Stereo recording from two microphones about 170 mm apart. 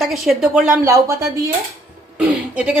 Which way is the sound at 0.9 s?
20° right (ahead or behind).